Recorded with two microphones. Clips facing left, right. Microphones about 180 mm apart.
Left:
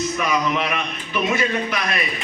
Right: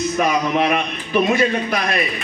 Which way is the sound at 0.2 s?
40° right (ahead or behind).